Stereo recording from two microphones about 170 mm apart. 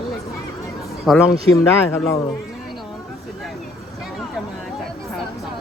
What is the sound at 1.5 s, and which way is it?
Speech, 15° left (ahead or behind).